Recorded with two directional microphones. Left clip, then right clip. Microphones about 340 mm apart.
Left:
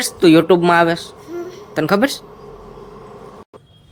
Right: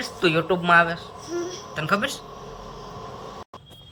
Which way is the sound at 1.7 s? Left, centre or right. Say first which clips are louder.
Left 8 dB; centre.